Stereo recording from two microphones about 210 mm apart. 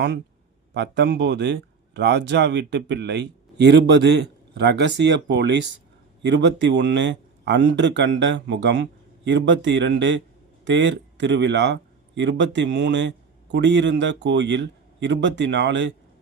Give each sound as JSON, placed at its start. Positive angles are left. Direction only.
{"t": 0.7, "sound": "speech", "side_deg": -55}